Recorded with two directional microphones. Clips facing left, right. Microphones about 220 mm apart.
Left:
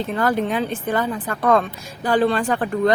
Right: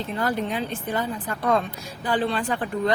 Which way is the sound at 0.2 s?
80° left.